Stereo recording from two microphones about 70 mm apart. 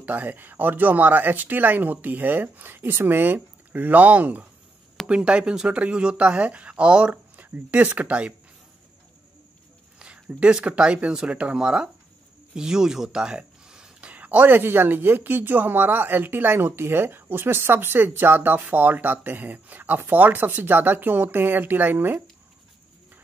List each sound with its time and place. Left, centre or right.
0.0 s speech: right
9.9 s speech: centre
12.5 s a sound: centre
14.1 s speech: right